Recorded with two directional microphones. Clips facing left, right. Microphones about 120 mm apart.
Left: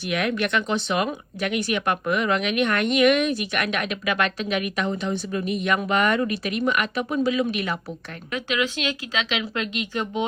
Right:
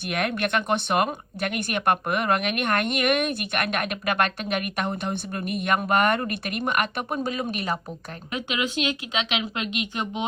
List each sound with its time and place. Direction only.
0.1 s a woman's voice: 50° right (ahead or behind)
8.8 s speech: 20° right (ahead or behind)